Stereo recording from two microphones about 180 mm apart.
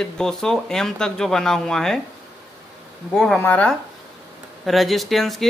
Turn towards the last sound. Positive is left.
turn(degrees=0)  # may be behind; listen again after turning